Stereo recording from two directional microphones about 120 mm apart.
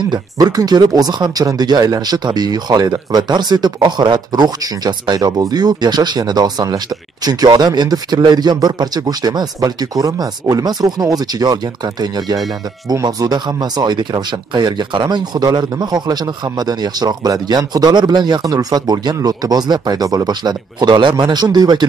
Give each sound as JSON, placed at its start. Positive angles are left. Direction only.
{"t": 0.1, "sound": "speech", "side_deg": -30}